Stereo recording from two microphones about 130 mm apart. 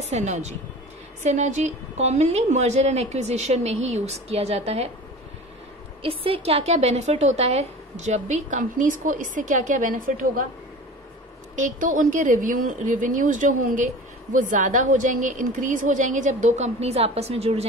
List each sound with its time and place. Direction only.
0.0 s a woman's voice: 60° right (ahead or behind)
6.0 s a woman's voice: 45° right (ahead or behind); by 10.4 s 90° right
11.5 s a woman's voice: 80° right
14.3 s a woman's voice: 75° right (ahead or behind); by 17.6 s 50° right (ahead or behind)